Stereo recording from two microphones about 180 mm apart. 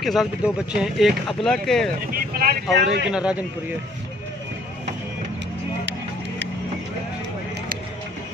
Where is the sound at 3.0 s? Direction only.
5° right (ahead or behind).